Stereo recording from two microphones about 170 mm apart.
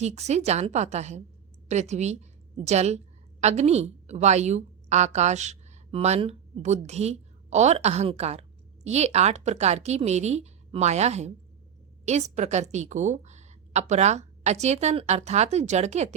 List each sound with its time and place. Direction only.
0.0 s a woman's voice: 40° right (ahead or behind)